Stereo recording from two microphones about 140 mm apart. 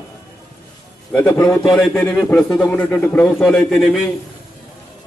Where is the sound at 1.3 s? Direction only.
20° left (ahead or behind).